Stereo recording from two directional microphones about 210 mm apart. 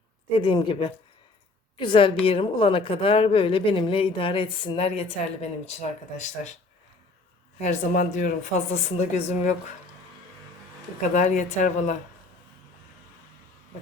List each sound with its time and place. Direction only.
0.3 s speech: 25° left (ahead or behind)
7.6 s speech: 35° left (ahead or behind)
11.1 s speech: 35° left (ahead or behind)